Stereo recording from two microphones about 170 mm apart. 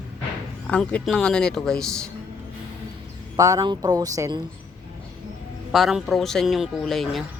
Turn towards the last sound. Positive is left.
turn(degrees=0)  # may be behind; listen again after turning